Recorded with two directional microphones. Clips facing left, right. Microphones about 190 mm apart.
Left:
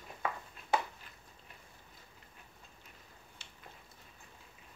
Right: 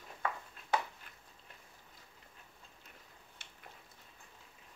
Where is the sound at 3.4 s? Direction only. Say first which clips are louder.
Left 1 dB; 55° right (ahead or behind).